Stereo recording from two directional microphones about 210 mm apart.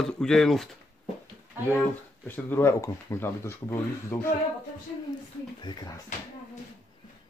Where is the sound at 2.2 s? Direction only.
10° left (ahead or behind).